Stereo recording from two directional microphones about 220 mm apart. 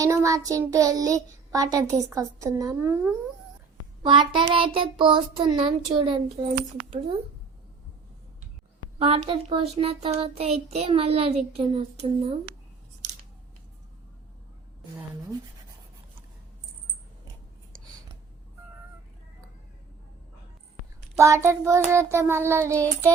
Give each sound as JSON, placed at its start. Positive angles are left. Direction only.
{"t": 0.0, "sound": "child singing", "side_deg": -15}
{"t": 4.0, "sound": "a child's voice", "side_deg": -20}
{"t": 9.0, "sound": "a child's voice", "side_deg": -25}
{"t": 13.0, "sound": "scissors", "side_deg": -35}
{"t": 21.2, "sound": "child singing", "side_deg": -15}